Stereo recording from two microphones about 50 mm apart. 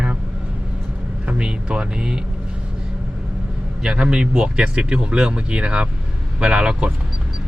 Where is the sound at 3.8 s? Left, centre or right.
Centre.